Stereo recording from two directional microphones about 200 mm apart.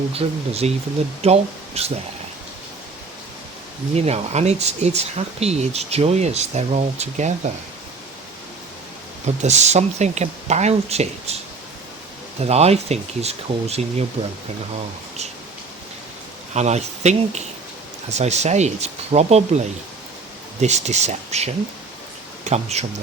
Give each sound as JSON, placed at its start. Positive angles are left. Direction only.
{"t": 0.1, "sound": "speech", "side_deg": -30}
{"t": 3.9, "sound": "speech", "side_deg": -30}
{"t": 9.2, "sound": "speech", "side_deg": -35}
{"t": 12.5, "sound": "speech", "side_deg": -30}
{"t": 16.6, "sound": "speech", "side_deg": -35}